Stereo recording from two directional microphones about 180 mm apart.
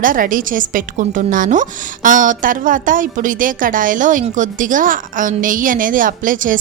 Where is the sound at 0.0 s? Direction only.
50° right (ahead or behind).